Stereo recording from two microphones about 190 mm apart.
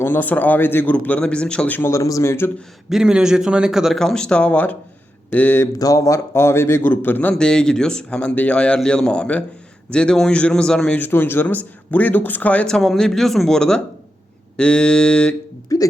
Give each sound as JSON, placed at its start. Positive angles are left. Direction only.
{"t": 0.0, "sound": "a man's voice", "side_deg": 10}
{"t": 2.9, "sound": "a man's voice", "side_deg": -5}
{"t": 15.7, "sound": "hiccup", "side_deg": 20}